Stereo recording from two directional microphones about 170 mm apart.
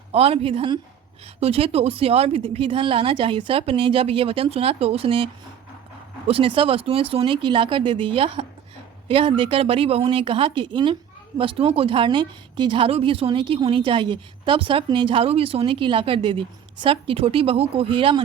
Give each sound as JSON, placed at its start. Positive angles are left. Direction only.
{"t": 0.1, "sound": "a woman's voice", "side_deg": -35}